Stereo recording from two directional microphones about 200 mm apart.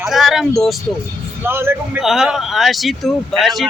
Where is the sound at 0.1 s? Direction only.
Centre (ahead or behind).